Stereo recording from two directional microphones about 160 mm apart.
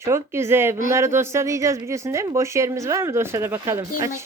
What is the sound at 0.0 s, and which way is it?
Speech, 15° right (ahead or behind).